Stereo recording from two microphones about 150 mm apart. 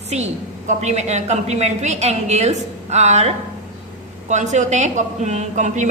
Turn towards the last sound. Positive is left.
turn(degrees=-55)  # may be behind; listen again after turning